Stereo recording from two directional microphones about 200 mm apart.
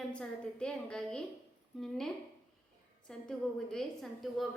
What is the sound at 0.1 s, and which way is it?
A woman's voice, 5° left (ahead or behind).